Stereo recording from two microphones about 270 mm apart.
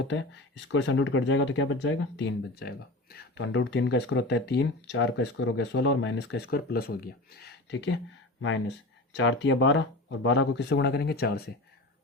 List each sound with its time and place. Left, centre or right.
0.0 s speech: left